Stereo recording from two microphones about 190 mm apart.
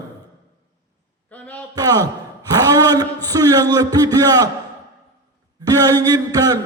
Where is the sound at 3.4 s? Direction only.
20° right (ahead or behind).